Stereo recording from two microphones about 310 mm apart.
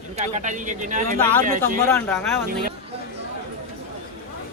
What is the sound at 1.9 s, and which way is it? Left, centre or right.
Speech, centre.